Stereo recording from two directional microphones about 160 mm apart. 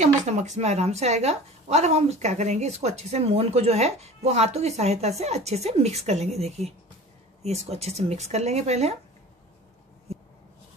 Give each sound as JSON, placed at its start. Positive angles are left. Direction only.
{"t": 0.0, "sound": "a woman's voice", "side_deg": -45}